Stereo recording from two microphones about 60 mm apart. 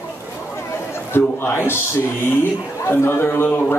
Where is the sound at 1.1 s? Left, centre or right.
Left.